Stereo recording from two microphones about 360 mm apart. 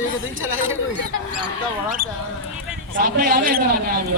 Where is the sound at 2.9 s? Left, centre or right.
Right.